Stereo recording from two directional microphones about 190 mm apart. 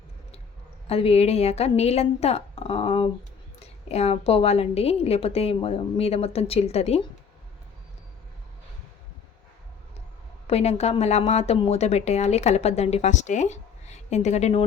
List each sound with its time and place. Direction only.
0.9 s a woman's voice: 30° left (ahead or behind)
10.4 s a woman's voice: 35° left (ahead or behind)